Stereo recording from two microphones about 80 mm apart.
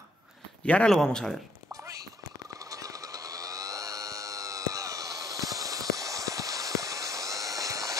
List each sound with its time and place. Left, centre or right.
0.7 s a man's voice: centre
1.7 s a sound: right
2.7 s chainsaw: right